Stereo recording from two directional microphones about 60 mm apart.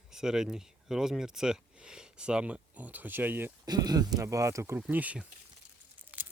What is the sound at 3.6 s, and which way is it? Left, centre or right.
Speech, right.